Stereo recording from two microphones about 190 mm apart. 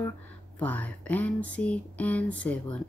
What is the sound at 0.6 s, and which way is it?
Speech, 10° left (ahead or behind).